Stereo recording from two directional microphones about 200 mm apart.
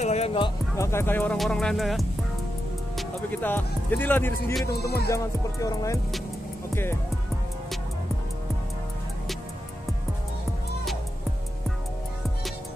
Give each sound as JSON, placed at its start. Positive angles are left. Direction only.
{"t": 0.0, "sound": "music", "side_deg": 35}
{"t": 0.7, "sound": "speech", "side_deg": 15}